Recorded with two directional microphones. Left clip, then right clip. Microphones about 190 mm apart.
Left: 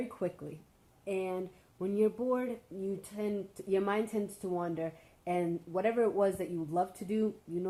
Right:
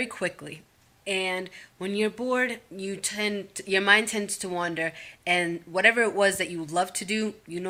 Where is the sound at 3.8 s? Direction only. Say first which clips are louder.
Right 12 dB; 10° right (ahead or behind).